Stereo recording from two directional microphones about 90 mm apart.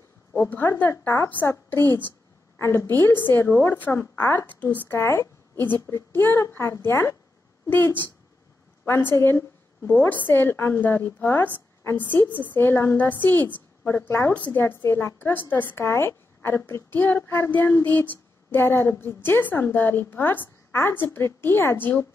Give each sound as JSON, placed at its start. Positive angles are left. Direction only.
{"t": 0.8, "sound": "a woman's voice", "side_deg": 30}
{"t": 14.3, "sound": "a woman's voice", "side_deg": 15}
{"t": 14.6, "sound": "a woman's voice", "side_deg": 30}